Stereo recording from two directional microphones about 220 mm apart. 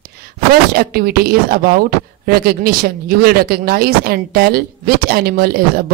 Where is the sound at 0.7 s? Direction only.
45° right (ahead or behind).